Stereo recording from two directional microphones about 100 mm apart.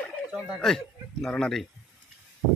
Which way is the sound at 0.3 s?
10° right (ahead or behind).